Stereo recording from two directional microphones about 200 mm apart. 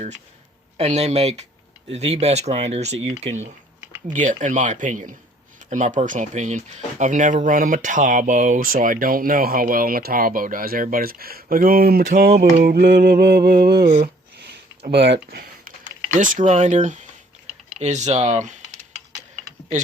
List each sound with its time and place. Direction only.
0.8 s speech: 35° right (ahead or behind); by 13.9 s 55° right (ahead or behind)
13.9 s a sound: 50° right (ahead or behind)
14.8 s speech: 55° right (ahead or behind)
16.1 s speech: 40° right (ahead or behind)